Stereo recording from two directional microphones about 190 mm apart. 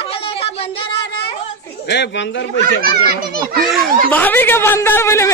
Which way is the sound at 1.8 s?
65° left (ahead or behind).